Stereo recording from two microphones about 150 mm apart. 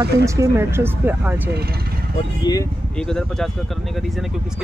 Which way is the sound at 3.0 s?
5° left (ahead or behind).